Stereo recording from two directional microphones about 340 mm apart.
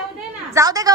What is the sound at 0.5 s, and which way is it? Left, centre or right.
Speech, centre.